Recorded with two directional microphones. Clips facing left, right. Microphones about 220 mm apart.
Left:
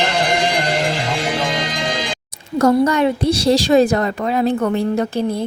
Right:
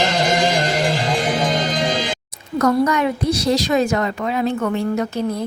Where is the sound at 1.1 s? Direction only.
45° right (ahead or behind).